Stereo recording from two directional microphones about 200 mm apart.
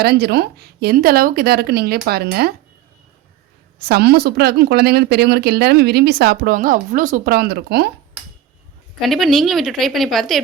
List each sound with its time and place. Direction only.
0.0 s speech: 55° right (ahead or behind)
3.8 s speech: 50° right (ahead or behind)
9.0 s a woman's voice: centre (ahead or behind)